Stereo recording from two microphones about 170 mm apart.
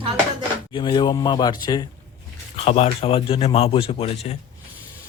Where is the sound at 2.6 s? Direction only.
40° left (ahead or behind).